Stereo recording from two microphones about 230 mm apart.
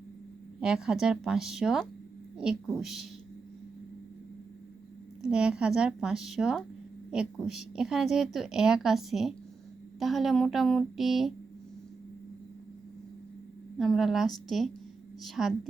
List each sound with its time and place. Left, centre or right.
0.6 s a woman's voice: centre
5.2 s a woman's voice: centre
13.7 s a woman's voice: centre